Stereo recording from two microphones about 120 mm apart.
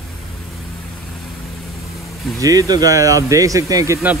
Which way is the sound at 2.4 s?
30° right (ahead or behind).